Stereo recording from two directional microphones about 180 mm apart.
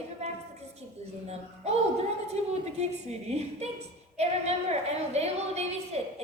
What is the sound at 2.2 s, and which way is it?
A woman's voice, 35° right (ahead or behind).